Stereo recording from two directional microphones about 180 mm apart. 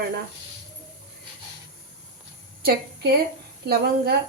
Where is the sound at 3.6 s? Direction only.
65° right (ahead or behind).